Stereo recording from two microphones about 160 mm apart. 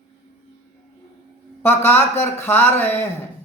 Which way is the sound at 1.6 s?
15° left (ahead or behind).